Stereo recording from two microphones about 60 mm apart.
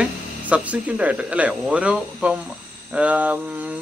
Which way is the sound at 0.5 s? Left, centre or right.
Right.